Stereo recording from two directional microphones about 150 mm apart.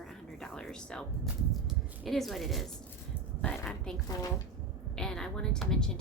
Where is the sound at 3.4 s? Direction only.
5° left (ahead or behind).